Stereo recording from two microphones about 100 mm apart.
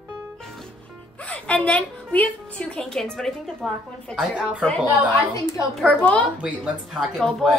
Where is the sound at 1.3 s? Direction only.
10° left (ahead or behind).